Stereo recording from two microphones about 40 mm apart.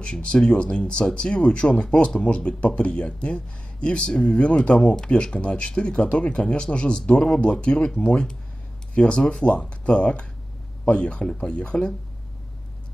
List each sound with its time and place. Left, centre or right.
0.0 s speech: left
9.0 s speech: left